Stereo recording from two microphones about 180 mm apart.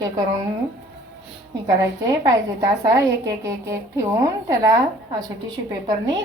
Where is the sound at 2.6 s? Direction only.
15° right (ahead or behind).